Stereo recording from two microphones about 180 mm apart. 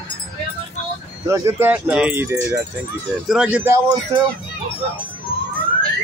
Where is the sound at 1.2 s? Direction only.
15° right (ahead or behind).